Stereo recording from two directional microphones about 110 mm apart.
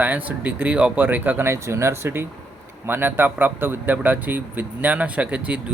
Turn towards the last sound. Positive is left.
turn(degrees=-10)  # may be behind; listen again after turning